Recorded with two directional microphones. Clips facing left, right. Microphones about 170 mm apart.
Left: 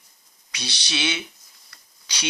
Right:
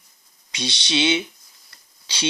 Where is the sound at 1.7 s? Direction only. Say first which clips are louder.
Right 1 dB; 25° right (ahead or behind).